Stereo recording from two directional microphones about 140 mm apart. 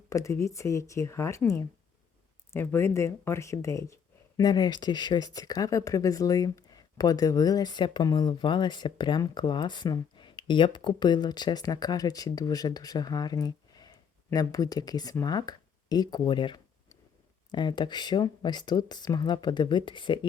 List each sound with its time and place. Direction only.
0.1 s speech: 20° left (ahead or behind)
2.5 s speech: 20° left (ahead or behind); by 20.1 s 35° left (ahead or behind)